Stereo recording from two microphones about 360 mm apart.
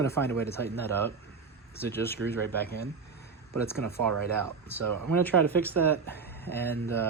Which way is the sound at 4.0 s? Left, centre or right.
Right.